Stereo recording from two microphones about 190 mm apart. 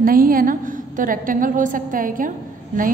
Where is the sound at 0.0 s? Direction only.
50° right (ahead or behind).